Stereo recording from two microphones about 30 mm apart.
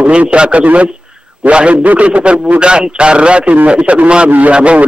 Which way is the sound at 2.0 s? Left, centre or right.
Right.